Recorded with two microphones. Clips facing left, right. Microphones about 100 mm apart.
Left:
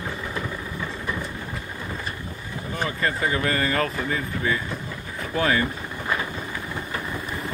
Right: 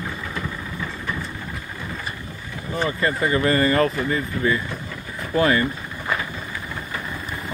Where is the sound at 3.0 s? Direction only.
Centre (ahead or behind).